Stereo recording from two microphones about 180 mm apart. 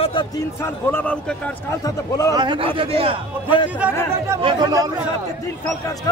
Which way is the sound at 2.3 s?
25° right (ahead or behind).